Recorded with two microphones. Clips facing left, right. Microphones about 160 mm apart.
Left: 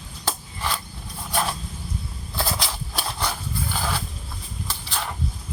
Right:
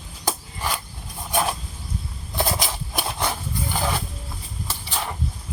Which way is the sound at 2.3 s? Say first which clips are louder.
Right 3 dB; 20° right (ahead or behind).